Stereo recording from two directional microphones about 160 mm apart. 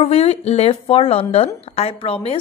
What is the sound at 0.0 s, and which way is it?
Speech, 40° left (ahead or behind).